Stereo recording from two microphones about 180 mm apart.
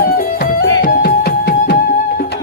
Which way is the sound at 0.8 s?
55° left (ahead or behind).